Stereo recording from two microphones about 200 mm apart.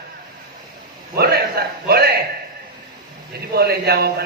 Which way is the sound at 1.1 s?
50° right (ahead or behind).